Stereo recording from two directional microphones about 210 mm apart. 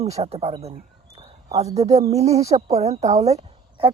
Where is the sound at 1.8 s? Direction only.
30° right (ahead or behind).